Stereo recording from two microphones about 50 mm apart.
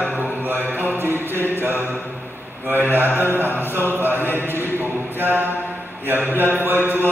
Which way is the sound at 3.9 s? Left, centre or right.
Right.